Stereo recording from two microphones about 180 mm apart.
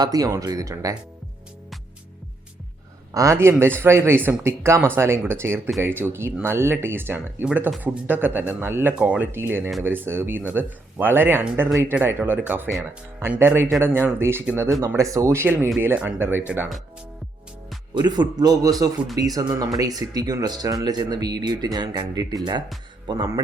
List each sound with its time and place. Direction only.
0.0 s speech: 20° right (ahead or behind)
3.2 s speech: 15° right (ahead or behind)
17.9 s speech: 25° right (ahead or behind)